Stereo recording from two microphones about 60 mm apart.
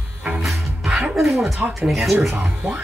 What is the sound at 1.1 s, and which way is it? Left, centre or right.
Speech, centre.